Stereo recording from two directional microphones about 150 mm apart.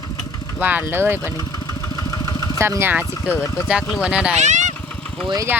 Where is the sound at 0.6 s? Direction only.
10° right (ahead or behind).